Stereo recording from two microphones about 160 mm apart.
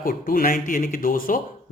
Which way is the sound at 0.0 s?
60° left (ahead or behind).